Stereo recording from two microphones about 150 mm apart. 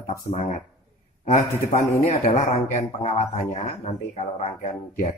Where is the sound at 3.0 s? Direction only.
45° left (ahead or behind).